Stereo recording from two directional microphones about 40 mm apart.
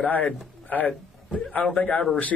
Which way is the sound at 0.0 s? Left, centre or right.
Left.